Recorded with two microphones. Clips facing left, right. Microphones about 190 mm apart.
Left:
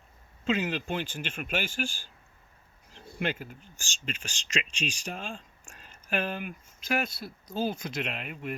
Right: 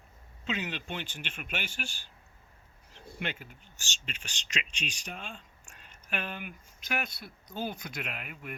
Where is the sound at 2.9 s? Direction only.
35° left (ahead or behind).